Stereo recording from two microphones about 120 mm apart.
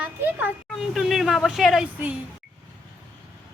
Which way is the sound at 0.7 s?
Centre (ahead or behind).